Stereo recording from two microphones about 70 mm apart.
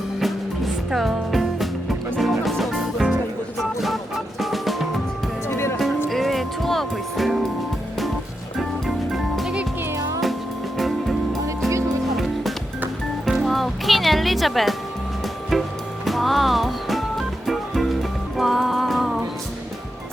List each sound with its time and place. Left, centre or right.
0.2 s music: centre
5.5 s music: left
6.1 s music: centre
9.1 s music: centre
9.9 s music: right
10.8 s music: centre
16.0 s music: centre